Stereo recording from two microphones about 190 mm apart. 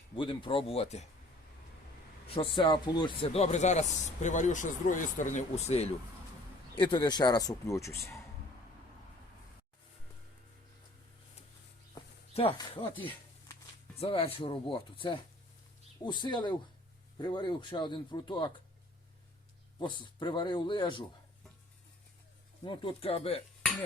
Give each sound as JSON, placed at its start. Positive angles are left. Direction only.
{"t": 0.2, "sound": "a man's voice", "side_deg": 25}
{"t": 2.2, "sound": "speech", "side_deg": 30}
{"t": 6.7, "sound": "a man's voice", "side_deg": 25}
{"t": 12.3, "sound": "a man's voice", "side_deg": 30}
{"t": 19.8, "sound": "a man's voice", "side_deg": 25}
{"t": 22.6, "sound": "speech", "side_deg": 25}